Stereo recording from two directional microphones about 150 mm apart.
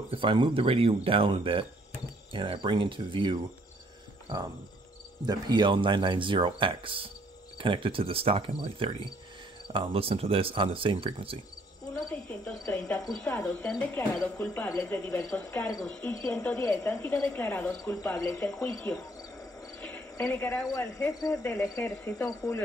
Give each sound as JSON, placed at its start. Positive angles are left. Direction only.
{"t": 0.1, "sound": "speech", "side_deg": -35}
{"t": 5.2, "sound": "speech", "side_deg": -30}
{"t": 11.9, "sound": "cricket", "side_deg": 15}
{"t": 15.8, "sound": "speech", "side_deg": 5}
{"t": 16.1, "sound": "cricket", "side_deg": 20}
{"t": 18.7, "sound": "cricket", "side_deg": 5}